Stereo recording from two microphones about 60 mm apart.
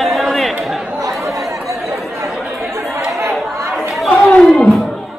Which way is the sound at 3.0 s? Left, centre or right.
Right.